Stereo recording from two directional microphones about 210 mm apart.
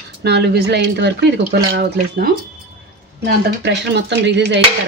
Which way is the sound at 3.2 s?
55° right (ahead or behind).